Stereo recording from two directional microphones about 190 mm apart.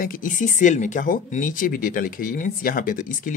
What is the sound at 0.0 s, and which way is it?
Speech, 45° left (ahead or behind).